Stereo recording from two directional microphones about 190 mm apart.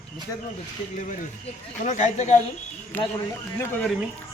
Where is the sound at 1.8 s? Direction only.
40° left (ahead or behind).